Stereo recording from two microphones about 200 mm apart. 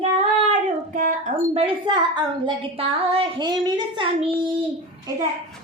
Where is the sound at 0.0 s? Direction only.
30° right (ahead or behind).